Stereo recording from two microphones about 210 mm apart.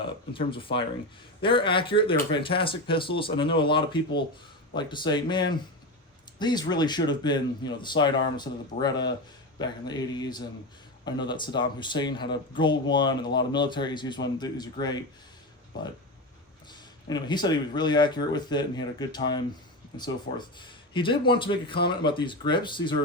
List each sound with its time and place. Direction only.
0.3 s speech: 25° left (ahead or behind)
17.1 s speech: 20° left (ahead or behind)